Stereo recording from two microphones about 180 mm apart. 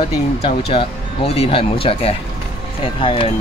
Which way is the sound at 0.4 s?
35° left (ahead or behind).